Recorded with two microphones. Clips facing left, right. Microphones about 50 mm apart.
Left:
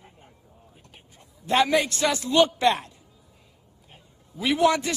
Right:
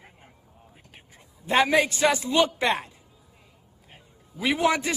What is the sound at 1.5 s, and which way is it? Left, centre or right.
Speech, centre.